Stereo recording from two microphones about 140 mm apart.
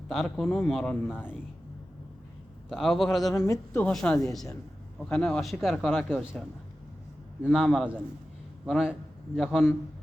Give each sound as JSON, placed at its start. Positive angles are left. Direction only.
{"t": 0.1, "sound": "speech", "side_deg": 0}
{"t": 2.6, "sound": "speech", "side_deg": 0}
{"t": 3.2, "sound": "a man's voice", "side_deg": 25}
{"t": 3.8, "sound": "a woman's voice", "side_deg": 10}
{"t": 7.5, "sound": "a man's voice", "side_deg": 0}